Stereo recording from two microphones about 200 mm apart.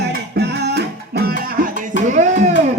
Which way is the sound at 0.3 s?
55° right (ahead or behind).